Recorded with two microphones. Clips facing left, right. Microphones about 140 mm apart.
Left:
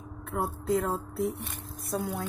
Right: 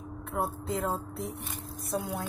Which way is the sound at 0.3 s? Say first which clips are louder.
Left 4 dB; centre (ahead or behind).